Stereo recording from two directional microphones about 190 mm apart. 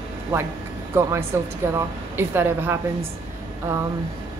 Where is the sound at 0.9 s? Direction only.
15° right (ahead or behind).